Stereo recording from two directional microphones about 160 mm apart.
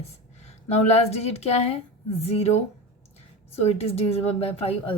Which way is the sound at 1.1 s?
40° left (ahead or behind).